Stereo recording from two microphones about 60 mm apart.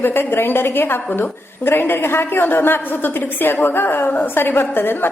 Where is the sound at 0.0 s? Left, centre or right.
Left.